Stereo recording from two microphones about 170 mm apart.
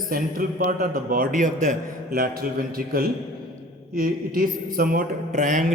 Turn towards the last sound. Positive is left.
turn(degrees=-45)  # may be behind; listen again after turning